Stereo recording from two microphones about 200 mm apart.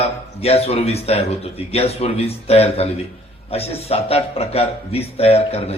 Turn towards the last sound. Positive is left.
turn(degrees=30)  # may be behind; listen again after turning